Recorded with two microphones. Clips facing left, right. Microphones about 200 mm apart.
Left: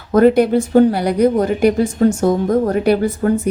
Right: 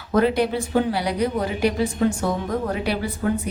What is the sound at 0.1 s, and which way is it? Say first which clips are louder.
A woman's voice: left 8 dB; 45° left (ahead or behind).